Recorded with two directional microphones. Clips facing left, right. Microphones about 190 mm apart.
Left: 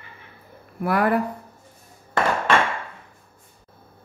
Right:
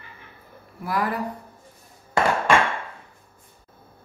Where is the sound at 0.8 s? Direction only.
60° left (ahead or behind).